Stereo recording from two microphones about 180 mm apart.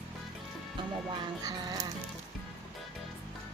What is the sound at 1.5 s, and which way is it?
Speech, 20° right (ahead or behind).